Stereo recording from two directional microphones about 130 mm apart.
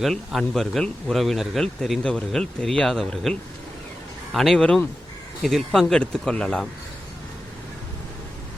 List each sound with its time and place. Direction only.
0.0 s speech: centre (ahead or behind)
4.4 s speech: 5° left (ahead or behind)